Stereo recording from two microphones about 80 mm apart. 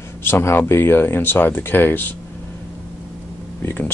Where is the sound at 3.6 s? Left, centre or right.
Left.